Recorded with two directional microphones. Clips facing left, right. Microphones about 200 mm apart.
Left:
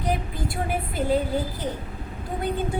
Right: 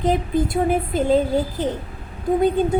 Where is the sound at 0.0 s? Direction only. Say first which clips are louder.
Right 8 dB; 20° right (ahead or behind).